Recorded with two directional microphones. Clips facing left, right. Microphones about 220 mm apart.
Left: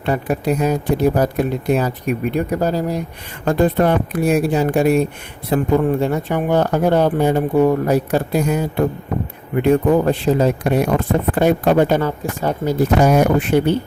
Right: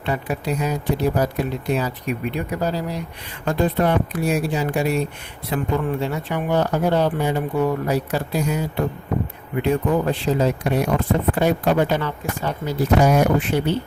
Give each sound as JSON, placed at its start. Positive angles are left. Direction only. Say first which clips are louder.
{"t": 0.0, "sound": "speech", "louder": "left 5 dB", "side_deg": 50}